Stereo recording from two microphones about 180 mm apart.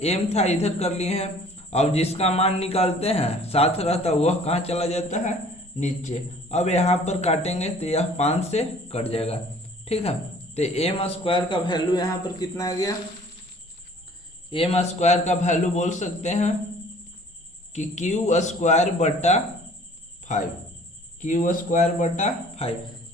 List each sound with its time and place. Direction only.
0.0 s speech: 35° left (ahead or behind); by 12.9 s 20° left (ahead or behind)
14.5 s speech: 35° left (ahead or behind)
17.7 s speech: 40° left (ahead or behind)